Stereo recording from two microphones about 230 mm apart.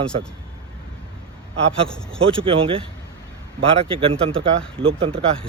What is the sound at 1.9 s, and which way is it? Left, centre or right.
Speech, centre.